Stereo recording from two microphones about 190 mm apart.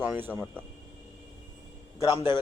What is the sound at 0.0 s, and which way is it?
Speech, 10° right (ahead or behind).